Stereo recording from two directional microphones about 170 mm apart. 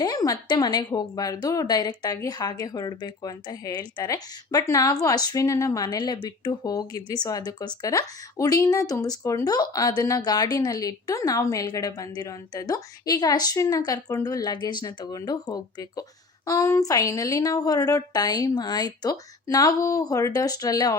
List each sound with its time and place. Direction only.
0.0 s a woman's voice: 20° left (ahead or behind)